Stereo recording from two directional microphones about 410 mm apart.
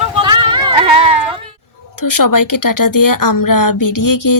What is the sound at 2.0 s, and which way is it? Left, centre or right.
Speech, left.